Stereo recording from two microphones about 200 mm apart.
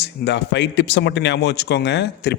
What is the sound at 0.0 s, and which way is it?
Speech, 60° left (ahead or behind).